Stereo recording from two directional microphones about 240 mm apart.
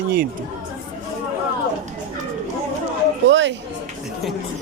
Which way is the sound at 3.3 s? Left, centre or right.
Right.